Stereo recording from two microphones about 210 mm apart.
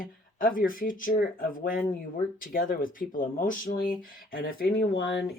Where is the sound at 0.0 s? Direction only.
40° left (ahead or behind).